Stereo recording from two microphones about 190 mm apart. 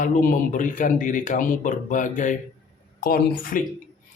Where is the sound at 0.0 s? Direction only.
45° left (ahead or behind).